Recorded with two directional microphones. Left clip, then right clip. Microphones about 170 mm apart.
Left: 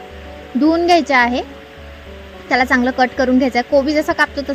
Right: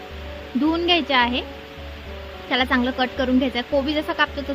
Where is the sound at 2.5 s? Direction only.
30° left (ahead or behind).